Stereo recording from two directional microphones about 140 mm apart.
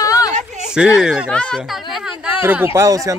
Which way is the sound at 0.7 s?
5° right (ahead or behind).